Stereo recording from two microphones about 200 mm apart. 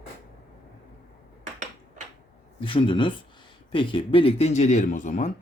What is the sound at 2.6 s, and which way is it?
Speech, 25° left (ahead or behind).